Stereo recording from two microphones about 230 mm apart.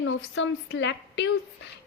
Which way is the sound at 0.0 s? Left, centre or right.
Left.